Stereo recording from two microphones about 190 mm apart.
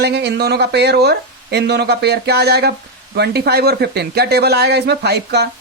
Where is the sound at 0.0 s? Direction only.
60° right (ahead or behind).